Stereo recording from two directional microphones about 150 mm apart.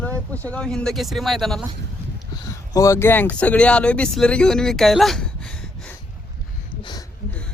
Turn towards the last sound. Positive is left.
turn(degrees=30)  # may be behind; listen again after turning